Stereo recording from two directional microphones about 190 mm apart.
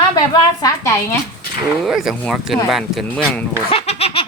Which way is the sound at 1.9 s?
Centre (ahead or behind).